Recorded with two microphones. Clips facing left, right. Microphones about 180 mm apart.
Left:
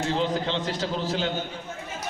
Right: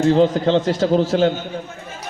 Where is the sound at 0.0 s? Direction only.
40° right (ahead or behind).